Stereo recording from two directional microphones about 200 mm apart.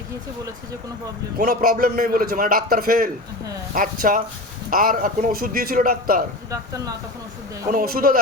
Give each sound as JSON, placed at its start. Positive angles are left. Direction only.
{"t": 1.4, "sound": "a man's voice", "side_deg": -45}
{"t": 7.7, "sound": "a man's voice", "side_deg": -45}